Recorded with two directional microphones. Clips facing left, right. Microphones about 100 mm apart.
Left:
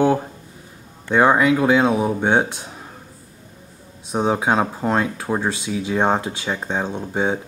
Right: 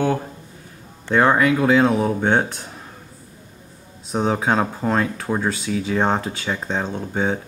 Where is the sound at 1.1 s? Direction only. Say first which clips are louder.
Left 1 dB; 10° left (ahead or behind).